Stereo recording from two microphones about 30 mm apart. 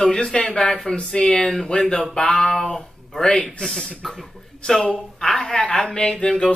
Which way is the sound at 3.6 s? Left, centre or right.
Left.